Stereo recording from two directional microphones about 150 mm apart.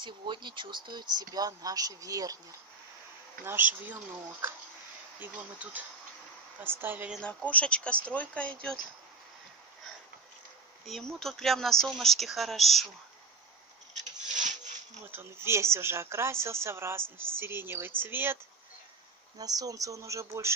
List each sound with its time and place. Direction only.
0.0 s speech: 30° right (ahead or behind)
3.4 s speech: 10° right (ahead or behind)
7.2 s speech: 10° left (ahead or behind)
10.9 s speech: centre (ahead or behind)
15.0 s speech: 15° right (ahead or behind)
19.3 s speech: 25° right (ahead or behind)